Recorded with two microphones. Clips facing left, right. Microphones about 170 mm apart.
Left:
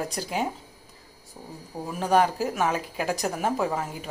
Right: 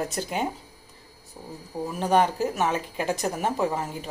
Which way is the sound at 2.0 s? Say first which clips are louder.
Even; centre (ahead or behind).